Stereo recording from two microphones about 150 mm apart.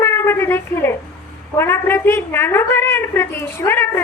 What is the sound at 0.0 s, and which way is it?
A woman's voice, 15° left (ahead or behind).